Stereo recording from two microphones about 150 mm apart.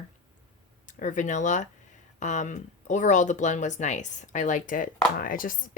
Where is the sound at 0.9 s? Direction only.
60° left (ahead or behind).